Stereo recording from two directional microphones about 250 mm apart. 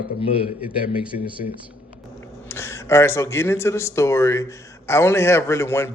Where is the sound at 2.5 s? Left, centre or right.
Centre.